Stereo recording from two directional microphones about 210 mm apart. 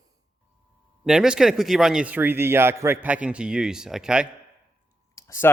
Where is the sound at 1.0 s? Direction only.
5° right (ahead or behind).